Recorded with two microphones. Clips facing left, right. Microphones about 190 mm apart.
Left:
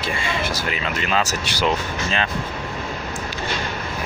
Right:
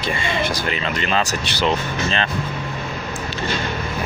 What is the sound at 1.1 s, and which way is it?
Speech, 10° left (ahead or behind).